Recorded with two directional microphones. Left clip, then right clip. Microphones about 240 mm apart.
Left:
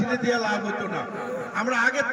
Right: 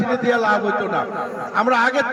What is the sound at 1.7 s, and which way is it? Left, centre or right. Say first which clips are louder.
Speech: right 5 dB; centre.